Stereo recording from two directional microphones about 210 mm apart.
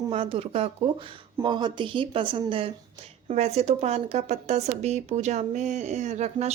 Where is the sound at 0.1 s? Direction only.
25° right (ahead or behind).